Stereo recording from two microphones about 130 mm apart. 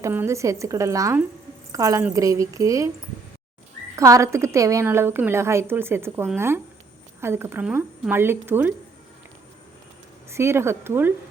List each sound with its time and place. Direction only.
0.0 s a woman's voice: 20° right (ahead or behind)
3.9 s a woman's voice: 25° right (ahead or behind)
10.2 s a woman's voice: 20° right (ahead or behind)